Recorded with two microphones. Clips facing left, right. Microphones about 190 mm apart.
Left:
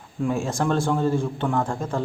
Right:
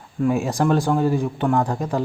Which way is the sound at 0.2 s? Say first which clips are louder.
Right 4 dB; 10° right (ahead or behind).